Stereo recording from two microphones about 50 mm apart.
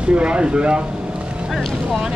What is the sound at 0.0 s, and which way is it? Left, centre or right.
Speech, right.